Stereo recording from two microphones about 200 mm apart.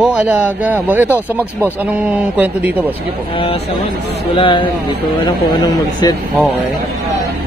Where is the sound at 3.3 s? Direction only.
30° left (ahead or behind).